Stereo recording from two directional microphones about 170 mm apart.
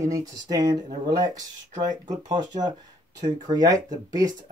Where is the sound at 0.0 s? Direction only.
20° right (ahead or behind).